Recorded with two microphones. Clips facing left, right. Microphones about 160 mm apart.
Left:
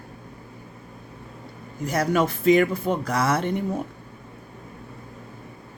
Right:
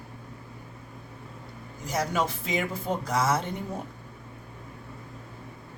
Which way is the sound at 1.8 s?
60° left (ahead or behind).